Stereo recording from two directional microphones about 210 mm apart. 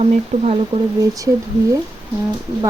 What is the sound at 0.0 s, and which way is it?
Speech, 30° right (ahead or behind).